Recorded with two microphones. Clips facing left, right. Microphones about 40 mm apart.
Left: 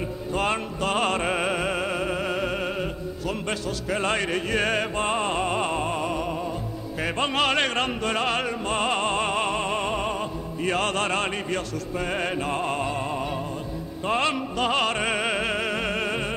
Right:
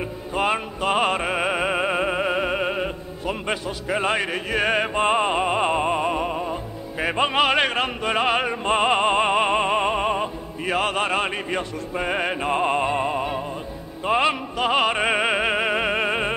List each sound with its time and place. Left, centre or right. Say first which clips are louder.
0.3 s music: right 3 dB; centre
7.0 s opera: right 4 dB; centre